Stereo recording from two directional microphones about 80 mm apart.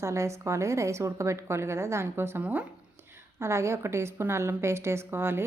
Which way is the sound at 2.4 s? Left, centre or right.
Centre.